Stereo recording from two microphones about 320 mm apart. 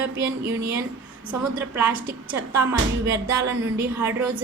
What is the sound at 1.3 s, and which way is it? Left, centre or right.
A woman's voice, centre.